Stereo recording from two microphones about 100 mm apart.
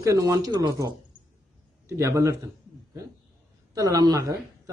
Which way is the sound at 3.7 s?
35° right (ahead or behind).